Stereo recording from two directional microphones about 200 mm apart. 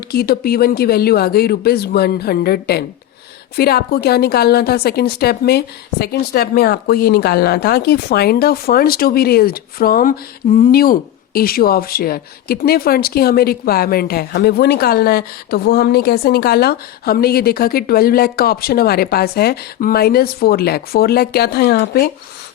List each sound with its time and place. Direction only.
0.1 s speech: 50° left (ahead or behind)